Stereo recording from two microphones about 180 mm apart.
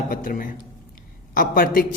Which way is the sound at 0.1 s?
50° left (ahead or behind).